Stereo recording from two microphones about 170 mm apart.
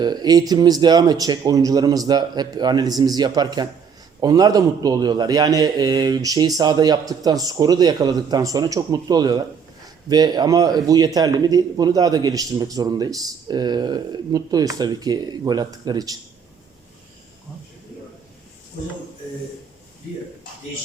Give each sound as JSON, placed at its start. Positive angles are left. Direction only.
{"t": 0.0, "sound": "a man's voice", "side_deg": -25}